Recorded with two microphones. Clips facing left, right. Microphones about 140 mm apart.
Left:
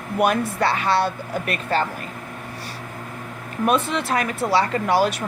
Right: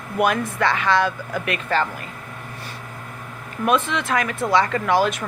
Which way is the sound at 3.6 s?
35° left (ahead or behind).